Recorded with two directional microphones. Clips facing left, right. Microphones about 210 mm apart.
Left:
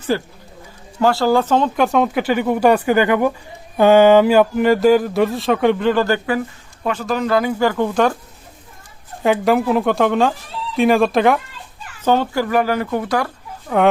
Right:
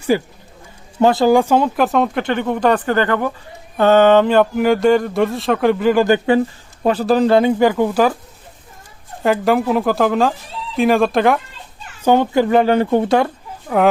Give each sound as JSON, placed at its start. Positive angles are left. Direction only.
{"t": 0.1, "sound": "speech", "side_deg": -15}
{"t": 5.9, "sound": "speech", "side_deg": -15}
{"t": 6.8, "sound": "speech", "side_deg": -35}
{"t": 7.7, "sound": "speech", "side_deg": -10}
{"t": 9.2, "sound": "speech", "side_deg": 0}
{"t": 12.0, "sound": "speech", "side_deg": -15}